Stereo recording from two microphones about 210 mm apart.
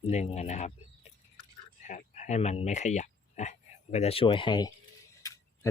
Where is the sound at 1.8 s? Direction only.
35° left (ahead or behind).